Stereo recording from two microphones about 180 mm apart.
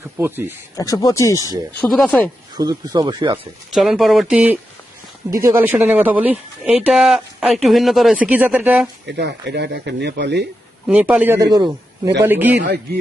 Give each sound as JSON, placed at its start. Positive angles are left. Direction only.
{"t": 0.2, "sound": "speech", "side_deg": -10}
{"t": 0.8, "sound": "speech", "side_deg": 20}
{"t": 1.8, "sound": "speech", "side_deg": 0}
{"t": 2.6, "sound": "speech", "side_deg": -20}
{"t": 3.7, "sound": "speech", "side_deg": 0}
{"t": 9.0, "sound": "speech", "side_deg": -70}
{"t": 10.8, "sound": "speech", "side_deg": -5}
{"t": 12.6, "sound": "speech", "side_deg": -60}